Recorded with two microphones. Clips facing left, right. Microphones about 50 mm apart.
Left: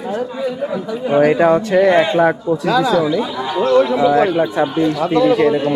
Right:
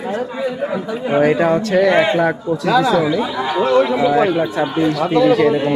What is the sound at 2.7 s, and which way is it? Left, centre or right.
A man's voice, centre.